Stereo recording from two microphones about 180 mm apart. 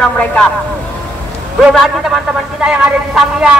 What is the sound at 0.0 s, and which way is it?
Speech, 5° left (ahead or behind).